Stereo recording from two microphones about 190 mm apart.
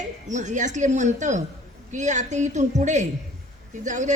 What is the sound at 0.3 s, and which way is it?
A woman's voice, 40° right (ahead or behind).